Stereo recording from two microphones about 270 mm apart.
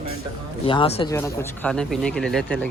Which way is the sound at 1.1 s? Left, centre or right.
Centre.